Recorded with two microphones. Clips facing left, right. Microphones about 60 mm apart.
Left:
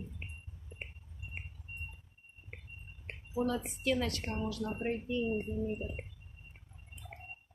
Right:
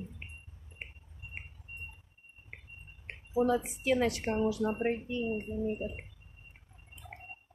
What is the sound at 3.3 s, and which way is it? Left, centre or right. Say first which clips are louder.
Speech: right 5 dB; centre.